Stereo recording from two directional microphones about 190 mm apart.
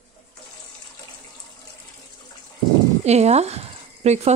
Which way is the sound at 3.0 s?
35° right (ahead or behind).